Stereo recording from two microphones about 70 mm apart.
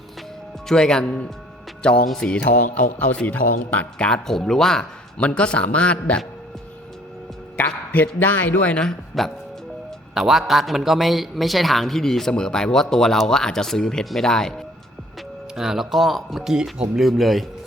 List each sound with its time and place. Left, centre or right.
0.7 s speech: centre
7.5 s speech: left
8.9 s a man's voice: centre
15.5 s a man's voice: centre